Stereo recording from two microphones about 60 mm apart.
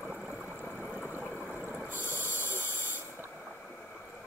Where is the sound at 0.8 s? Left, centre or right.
Centre.